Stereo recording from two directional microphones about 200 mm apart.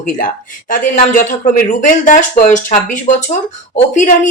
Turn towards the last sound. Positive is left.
turn(degrees=40)  # may be behind; listen again after turning